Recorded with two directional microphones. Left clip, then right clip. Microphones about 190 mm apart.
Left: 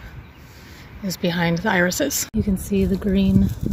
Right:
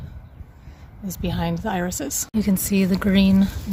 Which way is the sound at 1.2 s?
5° right (ahead or behind).